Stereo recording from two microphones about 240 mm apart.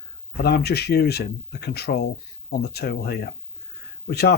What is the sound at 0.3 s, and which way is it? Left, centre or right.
Speech, left.